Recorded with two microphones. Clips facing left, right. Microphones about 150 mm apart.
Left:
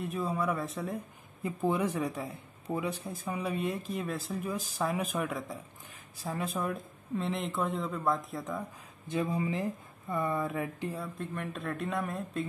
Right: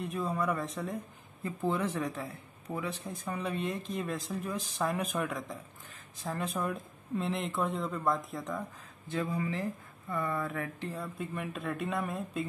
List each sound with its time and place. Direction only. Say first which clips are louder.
0.0 s speech: left 1 dB; centre (ahead or behind)
1.4 s speech: left 2 dB; 15° left (ahead or behind)
9.0 s speech: left 2 dB; 20° left (ahead or behind)
11.0 s speech: even; centre (ahead or behind)